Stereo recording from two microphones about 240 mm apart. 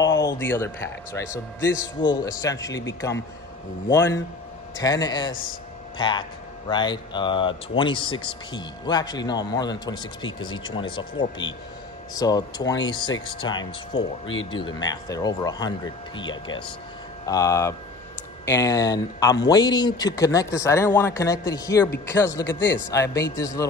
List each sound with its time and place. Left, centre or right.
0.3 s speech: centre
4.8 s a man's voice: centre
12.1 s speech: centre
14.2 s speech: left
14.5 s speech: centre